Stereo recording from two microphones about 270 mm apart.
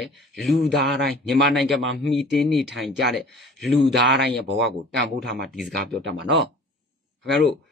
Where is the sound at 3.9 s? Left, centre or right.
Right.